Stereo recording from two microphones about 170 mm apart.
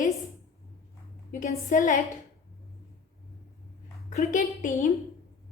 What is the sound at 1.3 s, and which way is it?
Speech, 50° left (ahead or behind).